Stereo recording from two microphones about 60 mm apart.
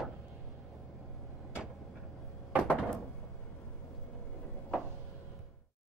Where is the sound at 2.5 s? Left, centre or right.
Right.